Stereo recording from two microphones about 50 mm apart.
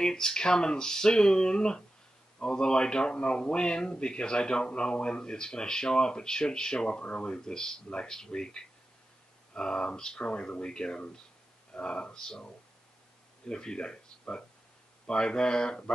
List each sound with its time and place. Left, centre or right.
0.0 s a man's voice: centre